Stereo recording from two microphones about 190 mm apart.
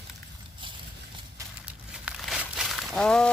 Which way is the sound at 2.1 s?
Centre (ahead or behind).